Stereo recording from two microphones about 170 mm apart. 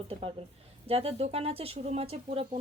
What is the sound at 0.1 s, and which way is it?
A woman's voice, 35° right (ahead or behind).